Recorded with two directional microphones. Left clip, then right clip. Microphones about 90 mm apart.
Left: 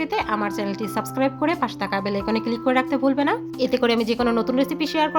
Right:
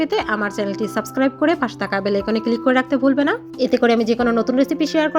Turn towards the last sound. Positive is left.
turn(degrees=-40)  # may be behind; listen again after turning